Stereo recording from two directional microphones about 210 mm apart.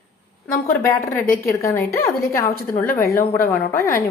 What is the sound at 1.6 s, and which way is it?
Speech, 15° left (ahead or behind).